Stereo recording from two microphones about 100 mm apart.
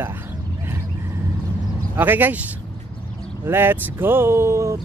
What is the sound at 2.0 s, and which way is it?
Speech, 20° right (ahead or behind).